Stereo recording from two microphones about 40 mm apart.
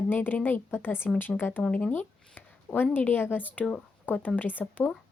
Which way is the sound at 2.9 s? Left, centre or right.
Left.